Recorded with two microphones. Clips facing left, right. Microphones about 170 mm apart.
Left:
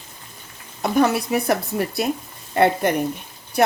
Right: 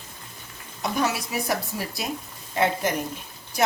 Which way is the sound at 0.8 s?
55° left (ahead or behind).